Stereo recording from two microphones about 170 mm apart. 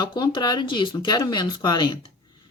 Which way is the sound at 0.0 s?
25° left (ahead or behind).